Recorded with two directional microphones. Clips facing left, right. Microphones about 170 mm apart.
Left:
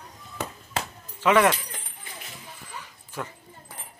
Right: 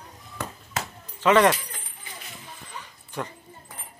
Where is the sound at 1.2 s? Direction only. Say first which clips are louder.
Right 1 dB; 10° left (ahead or behind).